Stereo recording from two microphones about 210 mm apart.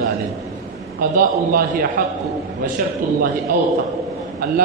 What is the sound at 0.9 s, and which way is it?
Speech, 45° right (ahead or behind).